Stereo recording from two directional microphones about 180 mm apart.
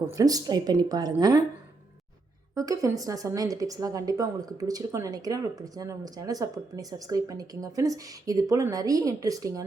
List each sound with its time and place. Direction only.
0.2 s a woman's voice: 20° right (ahead or behind)
2.6 s a woman's voice: 20° right (ahead or behind)